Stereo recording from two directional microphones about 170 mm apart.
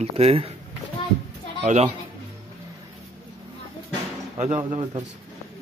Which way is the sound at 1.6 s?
40° right (ahead or behind).